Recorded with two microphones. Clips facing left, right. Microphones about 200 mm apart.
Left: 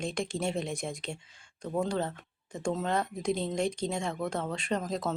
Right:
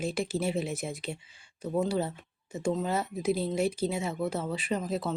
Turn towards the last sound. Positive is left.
turn(degrees=-5)  # may be behind; listen again after turning